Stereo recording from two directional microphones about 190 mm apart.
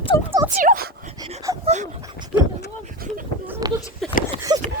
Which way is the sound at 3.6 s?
20° right (ahead or behind).